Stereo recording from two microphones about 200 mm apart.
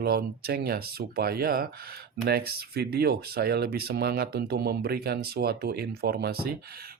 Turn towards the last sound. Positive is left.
turn(degrees=-50)  # may be behind; listen again after turning